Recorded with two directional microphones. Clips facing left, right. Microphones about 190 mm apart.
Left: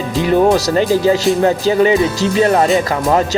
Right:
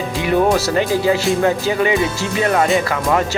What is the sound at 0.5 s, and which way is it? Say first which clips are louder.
Speech: left 3 dB; 40° left (ahead or behind).